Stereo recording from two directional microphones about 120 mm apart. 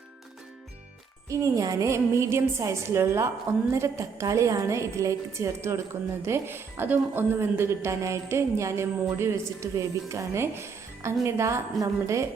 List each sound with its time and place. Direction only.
1.3 s a woman's voice: 30° right (ahead or behind)